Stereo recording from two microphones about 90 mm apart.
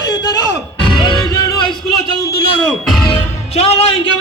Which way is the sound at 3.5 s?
90° left.